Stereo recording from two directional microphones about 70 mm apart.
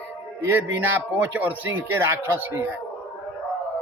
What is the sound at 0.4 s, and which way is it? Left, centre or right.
Speech, right.